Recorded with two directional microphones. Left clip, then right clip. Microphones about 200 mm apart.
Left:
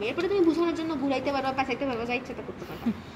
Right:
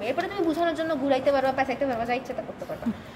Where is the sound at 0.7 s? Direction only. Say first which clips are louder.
Right 4 dB; 35° right (ahead or behind).